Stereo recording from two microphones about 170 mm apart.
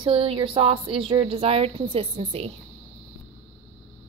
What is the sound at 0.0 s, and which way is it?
A woman's voice, 30° right (ahead or behind).